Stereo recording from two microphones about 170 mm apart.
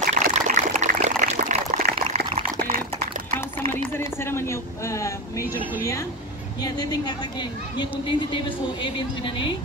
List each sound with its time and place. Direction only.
0.0 s water: 45° right (ahead or behind)
2.0 s dog: 40° right (ahead or behind)
3.3 s speech: 15° left (ahead or behind)
6.6 s a woman's voice: 25° left (ahead or behind)